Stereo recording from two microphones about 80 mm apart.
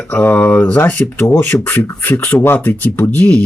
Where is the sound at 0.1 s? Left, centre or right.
Centre.